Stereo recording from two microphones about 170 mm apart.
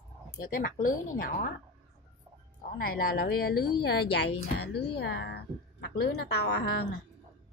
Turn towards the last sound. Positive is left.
turn(degrees=75)  # may be behind; listen again after turning